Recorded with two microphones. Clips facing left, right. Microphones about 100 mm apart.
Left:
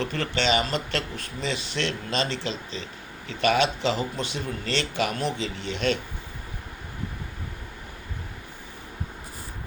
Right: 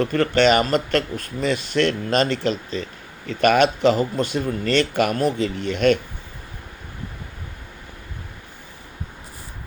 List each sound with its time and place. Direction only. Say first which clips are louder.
0.0 s speech: right 9 dB; 50° right (ahead or behind)